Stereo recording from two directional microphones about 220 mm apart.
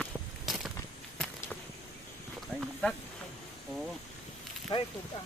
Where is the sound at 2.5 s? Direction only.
5° left (ahead or behind).